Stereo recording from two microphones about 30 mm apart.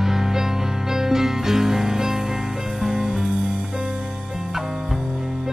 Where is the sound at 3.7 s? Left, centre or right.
Right.